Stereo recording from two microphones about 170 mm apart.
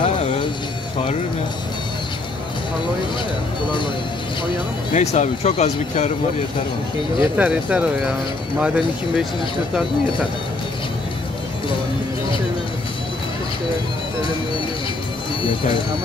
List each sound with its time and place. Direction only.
0.0 s music: 35° left (ahead or behind)
4.9 s speech: 40° left (ahead or behind)
7.3 s speech: 5° right (ahead or behind)